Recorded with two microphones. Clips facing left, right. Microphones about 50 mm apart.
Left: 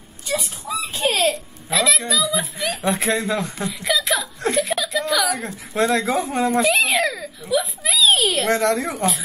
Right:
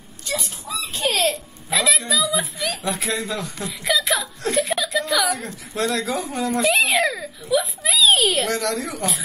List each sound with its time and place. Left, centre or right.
0.3 s baby laughter: centre
2.0 s a woman's voice: centre
2.6 s speech: left
3.6 s a sound: centre
5.4 s speech: centre
5.9 s speech: left
6.7 s baby cry: centre
7.4 s a sound: centre
8.5 s speech: left